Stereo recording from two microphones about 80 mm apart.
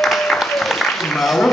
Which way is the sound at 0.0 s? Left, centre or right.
Centre.